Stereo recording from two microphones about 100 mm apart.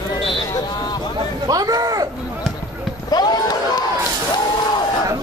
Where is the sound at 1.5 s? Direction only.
40° right (ahead or behind).